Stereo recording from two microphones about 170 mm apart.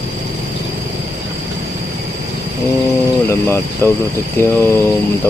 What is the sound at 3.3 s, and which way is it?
Speech, 15° left (ahead or behind).